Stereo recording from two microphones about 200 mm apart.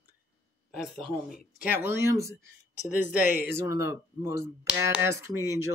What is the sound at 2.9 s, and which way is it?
Speech, 40° left (ahead or behind).